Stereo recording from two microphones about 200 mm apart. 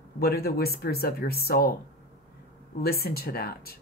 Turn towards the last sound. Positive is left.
turn(degrees=50)  # may be behind; listen again after turning